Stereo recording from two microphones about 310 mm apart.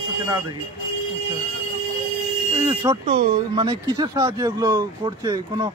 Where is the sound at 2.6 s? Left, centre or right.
Centre.